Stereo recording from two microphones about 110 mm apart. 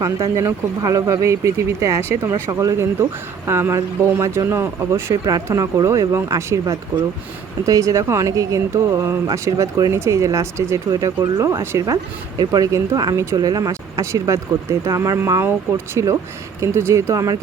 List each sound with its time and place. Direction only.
0.0 s speech: 30° right (ahead or behind)
16.0 s speech: 30° right (ahead or behind)